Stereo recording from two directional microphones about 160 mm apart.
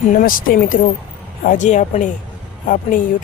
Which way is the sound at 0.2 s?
60° left (ahead or behind).